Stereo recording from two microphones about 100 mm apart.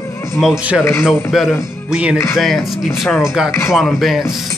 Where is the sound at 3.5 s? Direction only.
25° left (ahead or behind).